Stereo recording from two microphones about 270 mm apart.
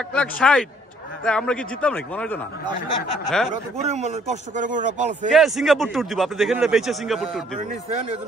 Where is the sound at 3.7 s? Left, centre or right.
Right.